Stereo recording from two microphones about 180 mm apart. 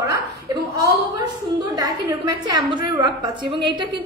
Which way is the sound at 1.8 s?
20° right (ahead or behind).